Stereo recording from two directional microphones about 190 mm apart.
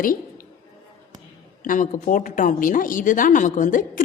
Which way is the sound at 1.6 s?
45° left (ahead or behind).